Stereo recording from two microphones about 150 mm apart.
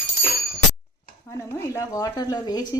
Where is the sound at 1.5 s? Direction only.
20° left (ahead or behind).